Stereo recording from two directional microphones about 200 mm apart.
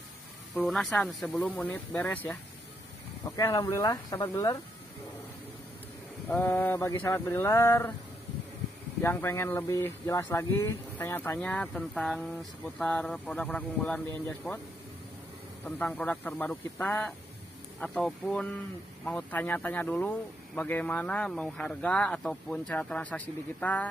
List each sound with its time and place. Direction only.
0.6 s speech: centre (ahead or behind)
3.3 s speech: 15° left (ahead or behind)
6.2 s speech: 10° left (ahead or behind)
9.0 s speech: 15° left (ahead or behind)
15.6 s speech: 10° left (ahead or behind)